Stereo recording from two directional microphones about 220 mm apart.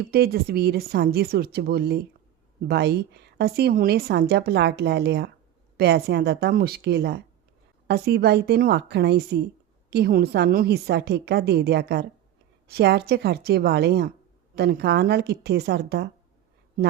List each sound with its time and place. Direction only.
0.0 s a woman's voice: 45° right (ahead or behind)